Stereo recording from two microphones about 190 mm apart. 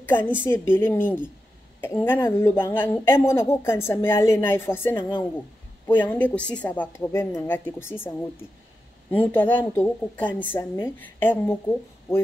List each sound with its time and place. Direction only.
0.0 s a woman's voice: 10° left (ahead or behind)
9.1 s speech: 10° left (ahead or behind)